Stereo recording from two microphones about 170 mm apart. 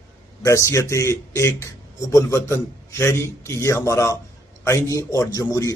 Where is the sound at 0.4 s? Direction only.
20° left (ahead or behind).